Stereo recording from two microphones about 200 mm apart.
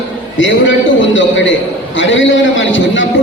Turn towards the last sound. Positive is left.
turn(degrees=70)  # may be behind; listen again after turning